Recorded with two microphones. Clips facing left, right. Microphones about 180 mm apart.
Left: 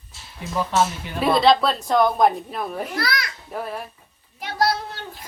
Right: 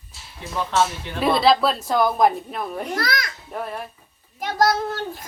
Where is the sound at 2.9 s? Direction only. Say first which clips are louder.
Right 3 dB; 45° right (ahead or behind).